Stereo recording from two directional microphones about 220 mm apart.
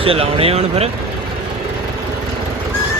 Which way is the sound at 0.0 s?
25° right (ahead or behind).